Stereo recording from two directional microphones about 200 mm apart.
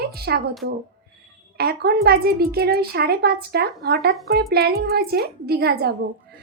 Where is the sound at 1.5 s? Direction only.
50° right (ahead or behind).